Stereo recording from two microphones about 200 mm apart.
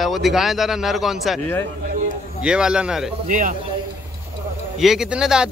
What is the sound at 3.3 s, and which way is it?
Speech, 40° right (ahead or behind).